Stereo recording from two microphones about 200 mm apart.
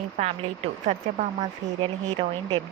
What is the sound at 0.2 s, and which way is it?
Speech, 35° right (ahead or behind).